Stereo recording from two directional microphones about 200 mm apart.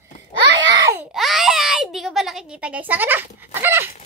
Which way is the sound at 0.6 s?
15° right (ahead or behind).